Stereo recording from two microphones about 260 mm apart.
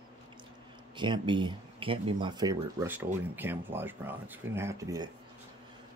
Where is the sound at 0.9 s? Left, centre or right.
Centre.